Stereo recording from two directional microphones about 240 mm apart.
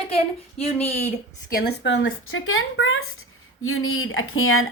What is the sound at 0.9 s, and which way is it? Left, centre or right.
Speech, left.